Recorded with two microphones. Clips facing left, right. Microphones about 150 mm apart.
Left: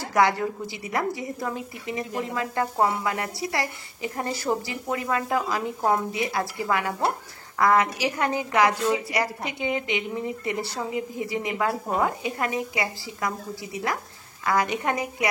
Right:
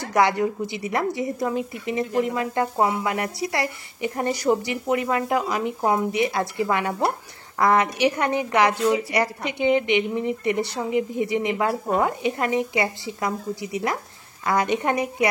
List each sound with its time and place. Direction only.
0.1 s a woman's voice: 20° right (ahead or behind)